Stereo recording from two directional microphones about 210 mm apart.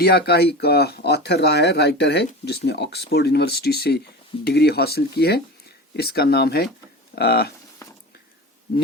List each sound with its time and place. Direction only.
0.0 s speech: 50° left (ahead or behind)